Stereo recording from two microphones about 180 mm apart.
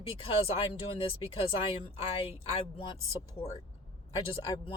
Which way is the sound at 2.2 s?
30° left (ahead or behind).